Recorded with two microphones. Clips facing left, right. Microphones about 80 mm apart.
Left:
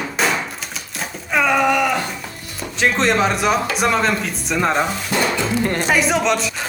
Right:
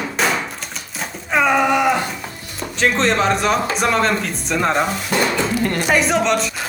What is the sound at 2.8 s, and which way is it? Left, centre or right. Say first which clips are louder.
Speech: even; centre.